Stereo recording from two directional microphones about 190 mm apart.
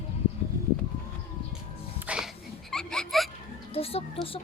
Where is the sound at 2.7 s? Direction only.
5° left (ahead or behind).